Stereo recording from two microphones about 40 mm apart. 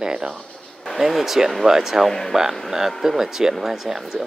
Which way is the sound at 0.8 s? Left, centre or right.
Centre.